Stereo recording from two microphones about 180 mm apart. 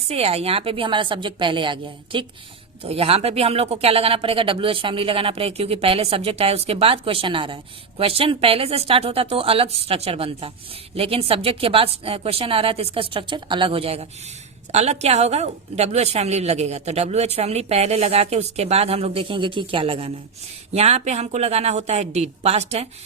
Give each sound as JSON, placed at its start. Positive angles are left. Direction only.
{"t": 0.1, "sound": "a woman's voice", "side_deg": -35}